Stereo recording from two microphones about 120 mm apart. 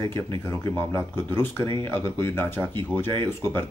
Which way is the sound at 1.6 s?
40° right (ahead or behind).